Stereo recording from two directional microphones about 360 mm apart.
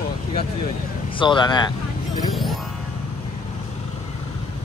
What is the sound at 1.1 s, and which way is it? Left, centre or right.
Speech, centre.